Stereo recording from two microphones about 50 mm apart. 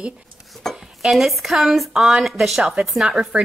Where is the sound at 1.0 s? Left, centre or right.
Centre.